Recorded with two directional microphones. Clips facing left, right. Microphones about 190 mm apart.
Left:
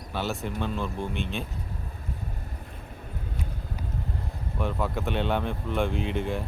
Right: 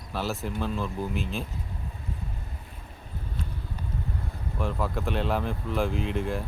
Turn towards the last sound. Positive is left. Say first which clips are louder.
# even
turn(degrees=0)  # may be behind; listen again after turning